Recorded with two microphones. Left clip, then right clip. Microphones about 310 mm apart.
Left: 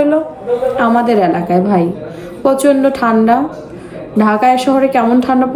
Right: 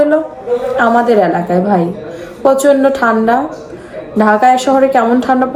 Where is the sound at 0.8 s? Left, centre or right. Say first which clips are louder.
Right 4 dB; right.